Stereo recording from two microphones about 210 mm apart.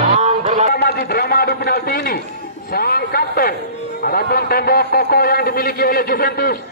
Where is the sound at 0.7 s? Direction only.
50° left (ahead or behind).